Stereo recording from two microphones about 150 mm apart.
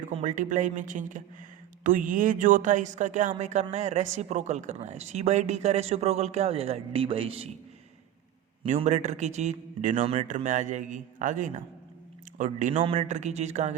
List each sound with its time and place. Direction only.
0.0 s speech: 50° right (ahead or behind)
8.6 s speech: 50° right (ahead or behind)
12.7 s speech: 35° right (ahead or behind)
13.1 s speech: 50° right (ahead or behind)